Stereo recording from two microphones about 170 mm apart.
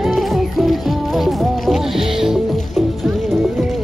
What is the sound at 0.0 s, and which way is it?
Music, centre (ahead or behind).